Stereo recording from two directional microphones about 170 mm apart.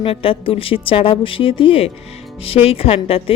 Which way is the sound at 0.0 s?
30° left (ahead or behind).